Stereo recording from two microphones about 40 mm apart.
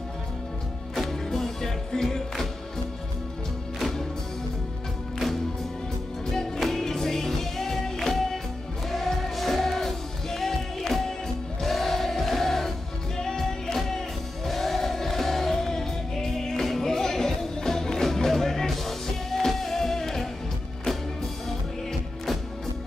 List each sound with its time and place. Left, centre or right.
0.9 s music: centre
6.6 s music: centre